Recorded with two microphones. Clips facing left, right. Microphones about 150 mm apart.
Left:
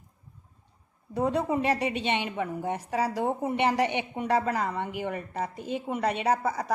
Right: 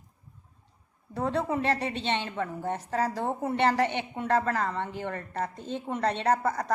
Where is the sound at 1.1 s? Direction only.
15° left (ahead or behind).